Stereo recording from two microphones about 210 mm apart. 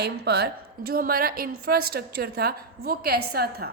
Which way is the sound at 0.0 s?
50° right (ahead or behind).